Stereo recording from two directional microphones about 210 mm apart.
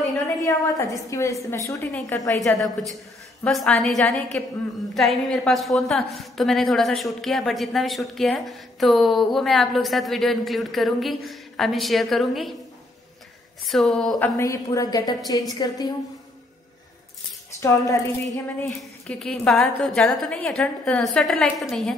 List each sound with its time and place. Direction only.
0.0 s a sound: 15° left (ahead or behind)
0.9 s a woman's voice: 15° left (ahead or behind)
3.4 s a woman's voice: 5° left (ahead or behind)
13.7 s a woman's voice: centre (ahead or behind)
14.2 s a woman's voice: 15° left (ahead or behind)
17.6 s a woman's voice: 15° left (ahead or behind)
18.8 s a woman's voice: 5° left (ahead or behind)